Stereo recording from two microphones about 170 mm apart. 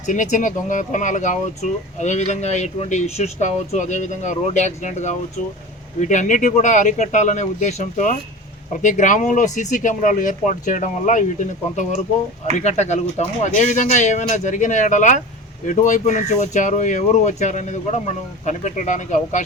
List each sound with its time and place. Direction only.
0.0 s speech: 45° left (ahead or behind)